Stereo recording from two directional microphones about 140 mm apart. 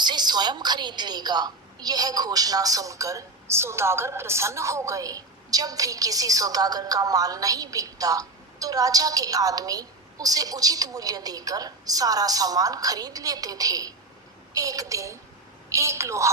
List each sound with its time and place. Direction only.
0.0 s a woman's voice: 30° right (ahead or behind)